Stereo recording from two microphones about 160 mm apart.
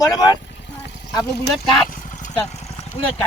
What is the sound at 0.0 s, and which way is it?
Speech, 25° left (ahead or behind).